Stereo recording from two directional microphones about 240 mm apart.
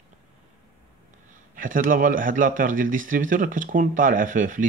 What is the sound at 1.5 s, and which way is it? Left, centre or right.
A man's voice, right.